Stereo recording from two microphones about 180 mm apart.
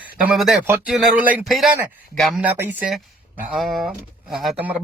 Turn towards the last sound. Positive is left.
turn(degrees=-5)  # may be behind; listen again after turning